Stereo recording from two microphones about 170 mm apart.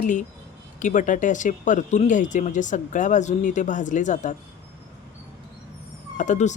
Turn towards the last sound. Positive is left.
turn(degrees=45)  # may be behind; listen again after turning